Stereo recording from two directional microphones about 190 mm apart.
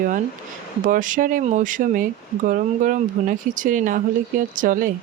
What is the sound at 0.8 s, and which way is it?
Speech, 45° right (ahead or behind).